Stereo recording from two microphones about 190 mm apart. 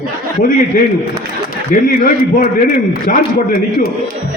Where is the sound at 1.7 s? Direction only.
45° left (ahead or behind).